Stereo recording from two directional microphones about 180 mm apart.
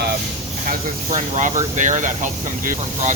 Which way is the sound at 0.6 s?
45° right (ahead or behind).